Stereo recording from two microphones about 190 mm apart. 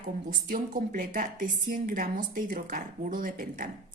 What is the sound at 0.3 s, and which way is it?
A woman's voice, 50° right (ahead or behind).